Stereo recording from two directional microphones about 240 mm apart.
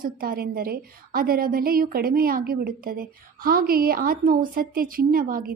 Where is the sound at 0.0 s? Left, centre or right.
Right.